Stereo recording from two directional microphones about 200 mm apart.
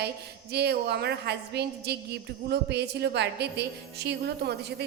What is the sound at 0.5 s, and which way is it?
A woman's voice, 55° right (ahead or behind).